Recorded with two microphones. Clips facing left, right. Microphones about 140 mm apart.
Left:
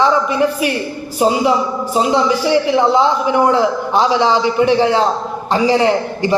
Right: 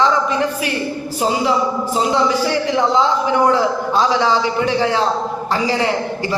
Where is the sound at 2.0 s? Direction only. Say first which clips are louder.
Left 3 dB; 15° left (ahead or behind).